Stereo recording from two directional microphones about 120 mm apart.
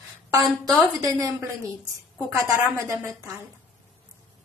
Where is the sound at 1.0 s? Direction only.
30° right (ahead or behind).